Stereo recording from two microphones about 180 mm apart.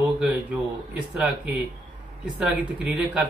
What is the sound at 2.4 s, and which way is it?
Speech, 5° right (ahead or behind).